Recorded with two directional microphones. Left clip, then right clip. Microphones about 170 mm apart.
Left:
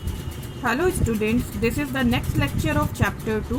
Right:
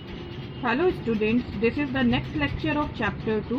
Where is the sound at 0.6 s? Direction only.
15° left (ahead or behind).